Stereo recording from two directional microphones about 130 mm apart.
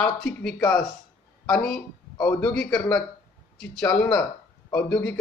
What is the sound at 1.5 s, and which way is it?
A man's voice, 5° left (ahead or behind).